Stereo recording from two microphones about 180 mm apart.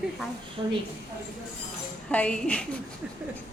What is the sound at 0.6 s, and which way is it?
Speech, 25° right (ahead or behind).